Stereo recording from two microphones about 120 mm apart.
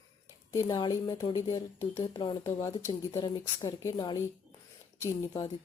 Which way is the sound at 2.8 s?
25° left (ahead or behind).